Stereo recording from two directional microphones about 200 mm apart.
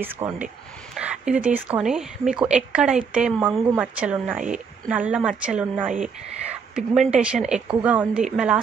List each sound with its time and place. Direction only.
0.0 s a woman's voice: 10° right (ahead or behind)